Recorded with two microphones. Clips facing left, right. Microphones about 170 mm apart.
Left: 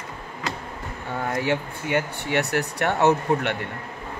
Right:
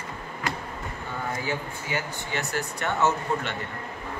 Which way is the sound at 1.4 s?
70° left (ahead or behind).